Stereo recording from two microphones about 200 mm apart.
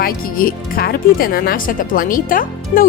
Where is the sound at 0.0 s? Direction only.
45° left (ahead or behind).